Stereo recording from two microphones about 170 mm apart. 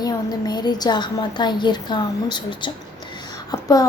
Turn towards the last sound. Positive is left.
turn(degrees=20)  # may be behind; listen again after turning